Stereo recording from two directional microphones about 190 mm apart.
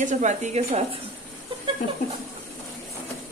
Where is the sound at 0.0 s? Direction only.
40° right (ahead or behind).